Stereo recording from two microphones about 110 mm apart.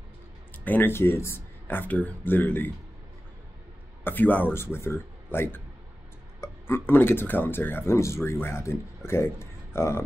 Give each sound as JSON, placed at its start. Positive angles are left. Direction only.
{"t": 0.7, "sound": "speech", "side_deg": 20}
{"t": 4.0, "sound": "speech", "side_deg": 15}